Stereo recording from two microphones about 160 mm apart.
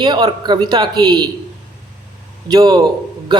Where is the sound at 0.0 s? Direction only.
25° right (ahead or behind).